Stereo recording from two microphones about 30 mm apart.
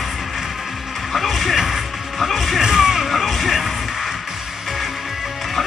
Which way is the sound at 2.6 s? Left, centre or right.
Centre.